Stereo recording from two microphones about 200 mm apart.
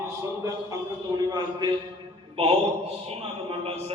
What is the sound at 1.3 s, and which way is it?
A man's voice, 20° right (ahead or behind).